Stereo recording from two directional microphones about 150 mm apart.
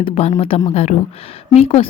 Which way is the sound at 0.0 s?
45° left (ahead or behind).